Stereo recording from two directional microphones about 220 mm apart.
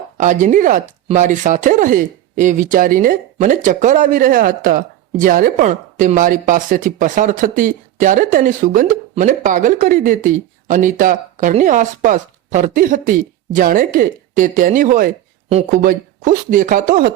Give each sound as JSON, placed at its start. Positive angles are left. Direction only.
{"t": 0.2, "sound": "speech", "side_deg": -35}